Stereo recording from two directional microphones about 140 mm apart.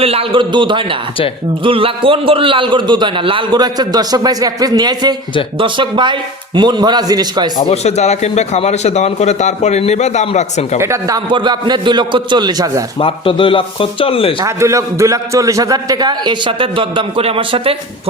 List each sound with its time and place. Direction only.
0.0 s a man's voice: 45° right (ahead or behind)
7.7 s a man's voice: 50° left (ahead or behind)
10.8 s a man's voice: 20° right (ahead or behind)
11.3 s a man's voice: 35° right (ahead or behind)
13.0 s speech: 40° left (ahead or behind)
14.4 s a man's voice: 20° right (ahead or behind); by 17.7 s 40° right (ahead or behind)